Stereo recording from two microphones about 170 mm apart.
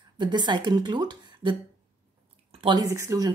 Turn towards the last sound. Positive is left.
turn(degrees=-20)  # may be behind; listen again after turning